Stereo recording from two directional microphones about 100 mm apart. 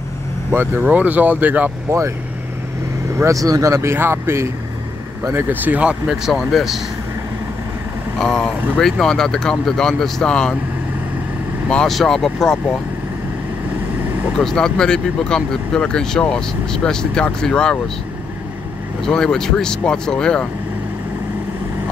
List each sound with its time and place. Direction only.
0.5 s speech: 20° right (ahead or behind)
1.9 s speech: 30° right (ahead or behind)
3.2 s speech: 35° right (ahead or behind); by 6.8 s centre (ahead or behind)
8.2 s speech: 5° left (ahead or behind)
11.7 s speech: 5° left (ahead or behind)
14.3 s speech: 5° left (ahead or behind)
19.0 s speech: 5° left (ahead or behind)